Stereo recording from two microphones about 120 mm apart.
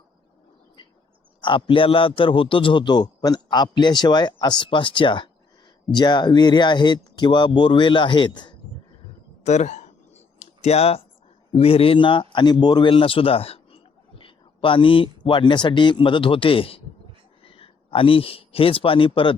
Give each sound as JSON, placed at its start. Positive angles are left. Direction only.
{"t": 1.4, "sound": "a man's voice", "side_deg": 45}
{"t": 9.4, "sound": "a sound", "side_deg": 70}
{"t": 11.5, "sound": "a man's voice", "side_deg": 55}